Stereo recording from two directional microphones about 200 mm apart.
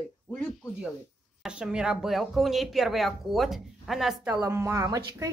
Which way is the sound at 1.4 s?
5° right (ahead or behind).